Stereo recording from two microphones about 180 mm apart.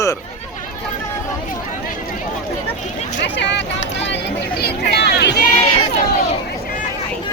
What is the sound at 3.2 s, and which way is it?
Speech, 75° left (ahead or behind).